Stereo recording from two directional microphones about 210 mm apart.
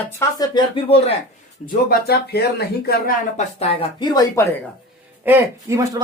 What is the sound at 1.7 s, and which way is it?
Speech, 50° left (ahead or behind).